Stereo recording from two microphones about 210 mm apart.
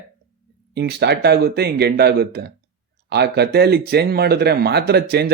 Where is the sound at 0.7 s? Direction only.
50° right (ahead or behind).